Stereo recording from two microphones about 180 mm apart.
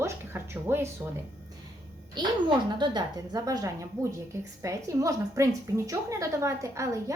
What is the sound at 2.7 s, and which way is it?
A woman's voice, 25° right (ahead or behind).